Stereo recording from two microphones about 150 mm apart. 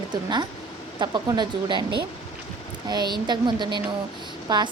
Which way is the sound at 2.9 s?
30° right (ahead or behind).